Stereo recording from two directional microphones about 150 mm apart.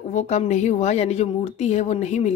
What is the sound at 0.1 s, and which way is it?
A woman's voice, 50° left (ahead or behind).